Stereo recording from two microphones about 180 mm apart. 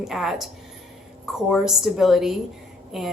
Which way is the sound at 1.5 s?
Centre (ahead or behind).